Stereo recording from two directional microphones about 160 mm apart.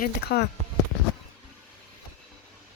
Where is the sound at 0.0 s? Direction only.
85° left.